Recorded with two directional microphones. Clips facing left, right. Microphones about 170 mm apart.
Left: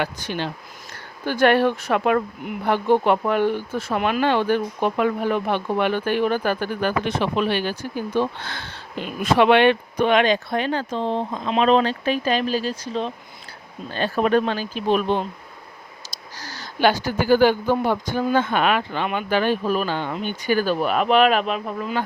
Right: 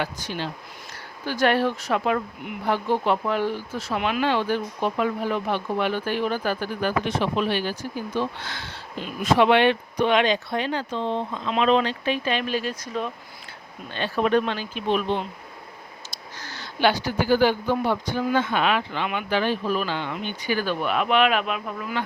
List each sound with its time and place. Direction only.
0.0 s speech: 65° left (ahead or behind); by 13.1 s 30° left (ahead or behind)
13.9 s speech: 40° left (ahead or behind)